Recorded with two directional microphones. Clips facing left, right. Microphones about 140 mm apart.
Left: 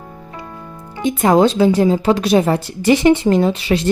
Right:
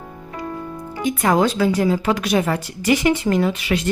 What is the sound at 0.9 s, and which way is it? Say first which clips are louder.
Speech: left 5 dB; 25° left (ahead or behind).